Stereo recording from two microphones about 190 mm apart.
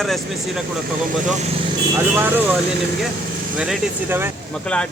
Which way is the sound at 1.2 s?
40° right (ahead or behind).